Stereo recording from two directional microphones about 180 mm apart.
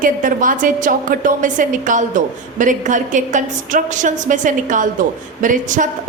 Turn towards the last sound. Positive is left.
turn(degrees=-45)  # may be behind; listen again after turning